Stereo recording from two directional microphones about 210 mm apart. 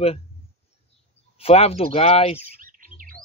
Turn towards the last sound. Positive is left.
turn(degrees=-40)  # may be behind; listen again after turning